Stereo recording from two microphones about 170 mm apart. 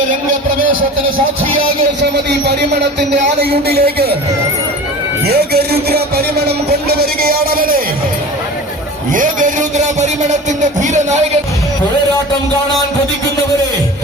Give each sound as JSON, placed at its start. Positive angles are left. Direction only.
{"t": 3.4, "sound": "speech", "side_deg": -70}
{"t": 5.2, "sound": "speech", "side_deg": -65}
{"t": 9.1, "sound": "a man's voice", "side_deg": -50}